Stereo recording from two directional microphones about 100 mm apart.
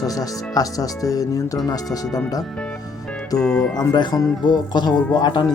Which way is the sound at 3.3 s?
40° left (ahead or behind).